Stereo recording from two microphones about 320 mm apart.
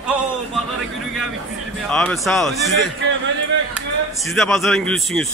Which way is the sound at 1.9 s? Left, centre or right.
Centre.